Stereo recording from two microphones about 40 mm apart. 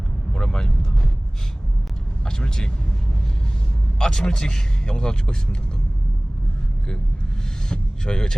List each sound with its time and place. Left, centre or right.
0.3 s speech: centre
2.2 s speech: centre
3.9 s speech: centre
7.7 s speech: left